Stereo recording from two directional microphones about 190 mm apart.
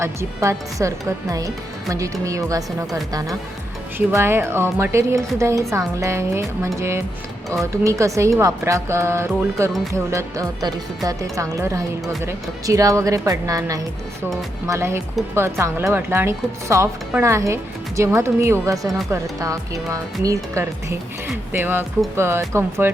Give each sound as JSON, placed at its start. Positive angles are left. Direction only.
{"t": 0.0, "sound": "speech", "side_deg": -15}
{"t": 18.8, "sound": "speech", "side_deg": 0}
{"t": 19.1, "sound": "speech", "side_deg": -15}